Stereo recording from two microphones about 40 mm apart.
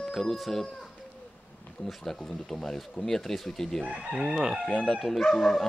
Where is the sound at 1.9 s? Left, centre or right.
Centre.